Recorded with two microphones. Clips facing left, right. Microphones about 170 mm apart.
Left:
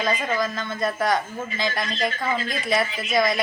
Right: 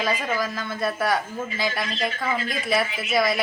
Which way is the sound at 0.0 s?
5° right (ahead or behind).